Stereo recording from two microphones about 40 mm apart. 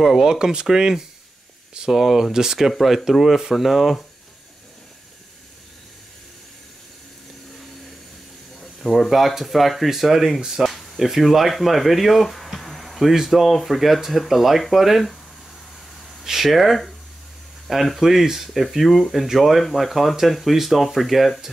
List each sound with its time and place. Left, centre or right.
0.0 s speech: centre
8.5 s speech: centre
10.6 s a sound: centre
11.1 s speech: centre
16.3 s speech: centre